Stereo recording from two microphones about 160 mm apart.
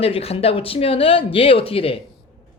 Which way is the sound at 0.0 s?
40° left (ahead or behind).